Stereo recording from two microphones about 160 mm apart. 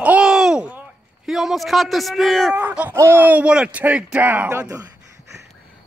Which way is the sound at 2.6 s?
10° right (ahead or behind).